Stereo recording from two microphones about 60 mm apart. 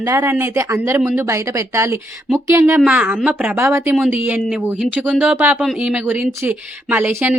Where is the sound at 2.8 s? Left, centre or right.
Right.